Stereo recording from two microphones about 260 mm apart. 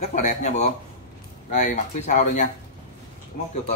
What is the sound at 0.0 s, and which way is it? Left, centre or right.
Speech, left.